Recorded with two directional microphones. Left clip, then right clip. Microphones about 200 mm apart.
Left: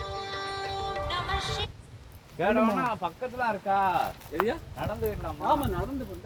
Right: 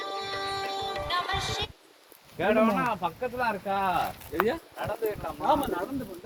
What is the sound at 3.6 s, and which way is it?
Speech, 45° right (ahead or behind).